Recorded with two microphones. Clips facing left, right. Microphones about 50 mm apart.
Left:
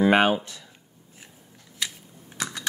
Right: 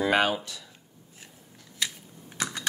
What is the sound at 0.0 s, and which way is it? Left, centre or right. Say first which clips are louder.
Speech: left 5 dB; left.